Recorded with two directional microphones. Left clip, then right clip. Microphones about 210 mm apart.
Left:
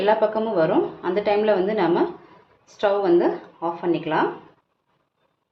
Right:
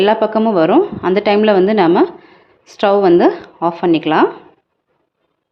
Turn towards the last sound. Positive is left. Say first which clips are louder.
# right 9 dB
turn(degrees=-50)  # may be behind; listen again after turning